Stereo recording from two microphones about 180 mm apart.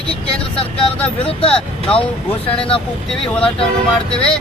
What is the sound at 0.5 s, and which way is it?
Speech, 30° left (ahead or behind).